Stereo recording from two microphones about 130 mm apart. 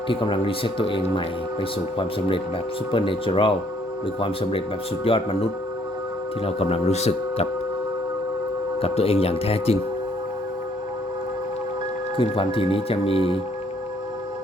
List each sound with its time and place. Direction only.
0.1 s speech: 40° left (ahead or behind)
8.8 s speech: 50° left (ahead or behind)
12.1 s speech: 45° left (ahead or behind)